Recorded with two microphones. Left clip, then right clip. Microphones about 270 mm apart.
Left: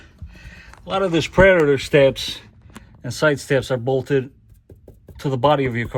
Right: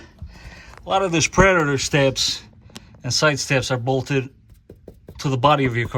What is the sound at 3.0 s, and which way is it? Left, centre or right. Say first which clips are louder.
Speech: even; right.